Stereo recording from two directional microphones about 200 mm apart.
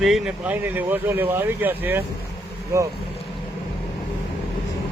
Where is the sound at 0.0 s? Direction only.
Centre (ahead or behind).